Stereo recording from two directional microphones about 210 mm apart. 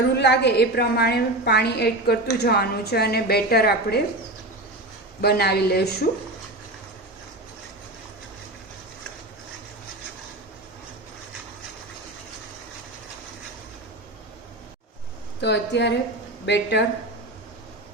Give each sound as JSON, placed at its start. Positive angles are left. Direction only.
{"t": 0.2, "sound": "a woman's voice", "side_deg": 55}
{"t": 5.2, "sound": "a woman's voice", "side_deg": 50}
{"t": 15.4, "sound": "a woman's voice", "side_deg": 55}